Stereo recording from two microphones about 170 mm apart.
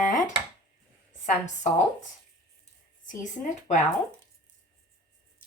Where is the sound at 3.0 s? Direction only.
45° left (ahead or behind).